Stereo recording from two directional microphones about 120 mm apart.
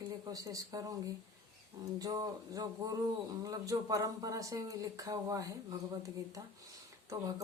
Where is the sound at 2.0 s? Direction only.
30° right (ahead or behind).